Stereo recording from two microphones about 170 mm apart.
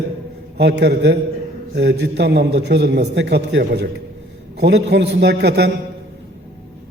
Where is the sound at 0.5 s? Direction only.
75° right (ahead or behind).